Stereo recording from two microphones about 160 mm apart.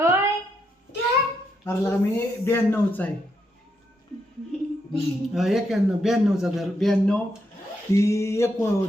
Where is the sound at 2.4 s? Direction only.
15° left (ahead or behind).